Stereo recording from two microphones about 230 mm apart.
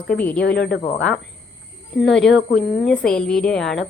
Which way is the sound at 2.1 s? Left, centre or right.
Centre.